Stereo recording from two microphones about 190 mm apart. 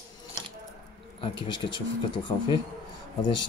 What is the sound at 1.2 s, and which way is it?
Speech, 25° left (ahead or behind).